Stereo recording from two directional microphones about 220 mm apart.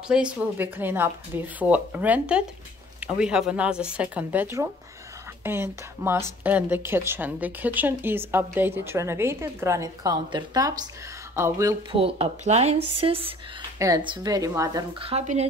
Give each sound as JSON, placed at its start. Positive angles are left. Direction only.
{"t": 0.1, "sound": "speech", "side_deg": -5}
{"t": 12.0, "sound": "speech", "side_deg": -25}